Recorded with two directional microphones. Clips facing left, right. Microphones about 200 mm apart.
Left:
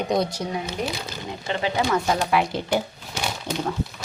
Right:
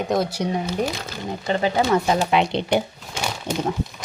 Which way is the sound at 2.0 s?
15° right (ahead or behind).